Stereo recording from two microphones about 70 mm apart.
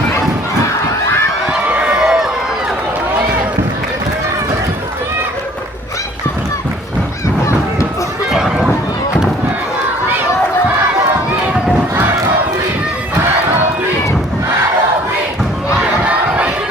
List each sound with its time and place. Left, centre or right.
1.7 s run: centre
8.3 s a sound: centre
15.8 s crowd: centre